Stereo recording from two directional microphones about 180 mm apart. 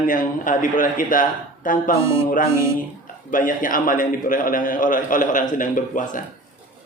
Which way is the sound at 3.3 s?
50° left (ahead or behind).